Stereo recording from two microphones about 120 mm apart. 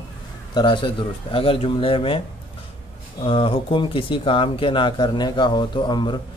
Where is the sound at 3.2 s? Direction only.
50° left (ahead or behind).